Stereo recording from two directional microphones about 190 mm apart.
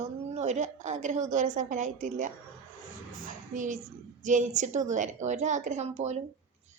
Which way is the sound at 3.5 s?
40° right (ahead or behind).